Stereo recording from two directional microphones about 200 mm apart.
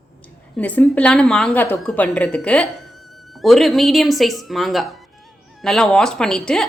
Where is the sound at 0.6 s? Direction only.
5° left (ahead or behind).